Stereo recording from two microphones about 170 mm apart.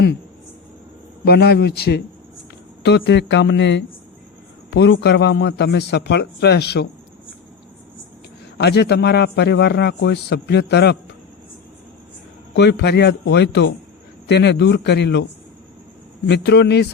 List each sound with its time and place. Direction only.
1.2 s a man's voice: 70° left (ahead or behind)
2.8 s a man's voice: 90° left
8.5 s a man's voice: 75° left (ahead or behind)
12.5 s a man's voice: 80° left